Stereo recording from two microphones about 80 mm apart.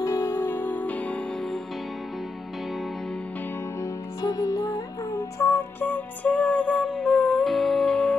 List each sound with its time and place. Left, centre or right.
0.0 s music: left; by 1.2 s centre
3.8 s music: left
5.4 s music: left; by 8.1 s centre